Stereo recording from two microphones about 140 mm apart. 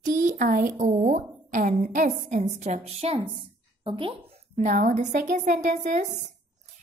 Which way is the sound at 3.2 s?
35° right (ahead or behind).